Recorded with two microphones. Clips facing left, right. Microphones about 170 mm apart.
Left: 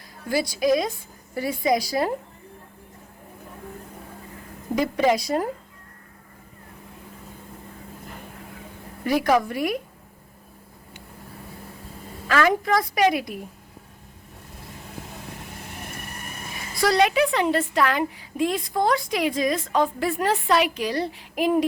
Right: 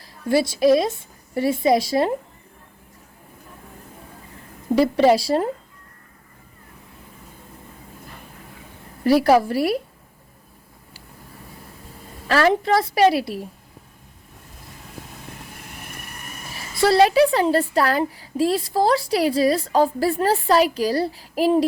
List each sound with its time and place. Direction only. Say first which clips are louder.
0.3 s a woman's voice: right 5 dB; 25° right (ahead or behind)
4.7 s a woman's voice: right 5 dB; 30° right (ahead or behind)
9.0 s a woman's voice: right 5 dB; 35° right (ahead or behind)
12.3 s a woman's voice: right 3 dB; 30° right (ahead or behind)
16.6 s a woman's voice: right 4 dB; 30° right (ahead or behind)